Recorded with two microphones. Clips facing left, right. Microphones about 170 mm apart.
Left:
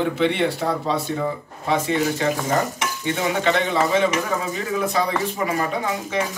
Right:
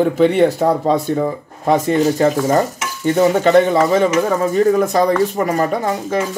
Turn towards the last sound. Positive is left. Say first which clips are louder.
# right 6 dB
turn(degrees=-45)  # may be behind; listen again after turning